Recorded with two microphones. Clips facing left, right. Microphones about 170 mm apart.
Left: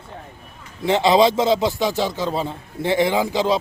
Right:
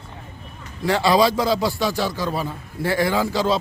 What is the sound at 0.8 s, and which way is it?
A man's voice, 20° left (ahead or behind).